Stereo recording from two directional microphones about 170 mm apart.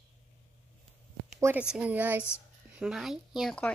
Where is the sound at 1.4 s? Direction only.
10° right (ahead or behind).